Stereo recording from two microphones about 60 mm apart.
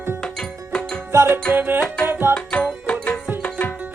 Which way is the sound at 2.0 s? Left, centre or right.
Right.